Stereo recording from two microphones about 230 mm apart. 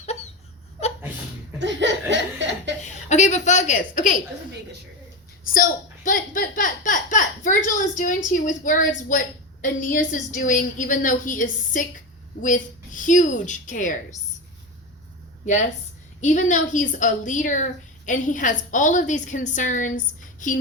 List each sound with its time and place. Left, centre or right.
1.5 s laughter: right
2.8 s a woman's voice: left
5.5 s speech: left
16.2 s speech: left